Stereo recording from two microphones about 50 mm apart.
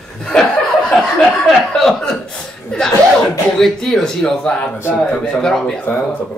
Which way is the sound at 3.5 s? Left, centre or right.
Centre.